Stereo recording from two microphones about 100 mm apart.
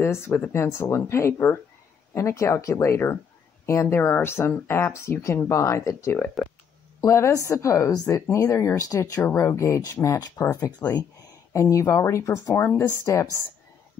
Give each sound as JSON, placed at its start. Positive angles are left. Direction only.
{"t": 0.0, "sound": "speech", "side_deg": 25}